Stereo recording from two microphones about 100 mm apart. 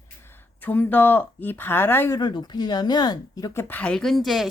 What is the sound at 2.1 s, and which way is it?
Speech, 45° left (ahead or behind).